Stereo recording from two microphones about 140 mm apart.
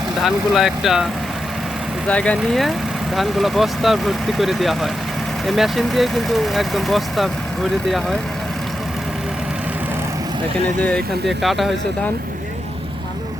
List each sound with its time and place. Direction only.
0.2 s speech: centre (ahead or behind)
2.0 s speech: 10° left (ahead or behind)
10.8 s speech: 10° left (ahead or behind)